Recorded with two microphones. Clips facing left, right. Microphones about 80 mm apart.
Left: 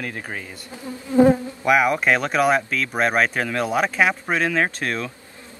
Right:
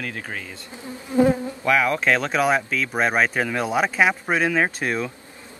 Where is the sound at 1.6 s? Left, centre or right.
Centre.